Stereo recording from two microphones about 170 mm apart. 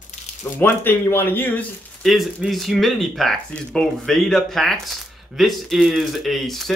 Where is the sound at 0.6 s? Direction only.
15° left (ahead or behind).